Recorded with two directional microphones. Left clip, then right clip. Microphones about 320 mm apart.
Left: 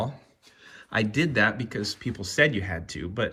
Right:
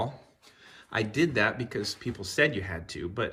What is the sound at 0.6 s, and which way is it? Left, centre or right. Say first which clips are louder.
Speech: left 3 dB; centre.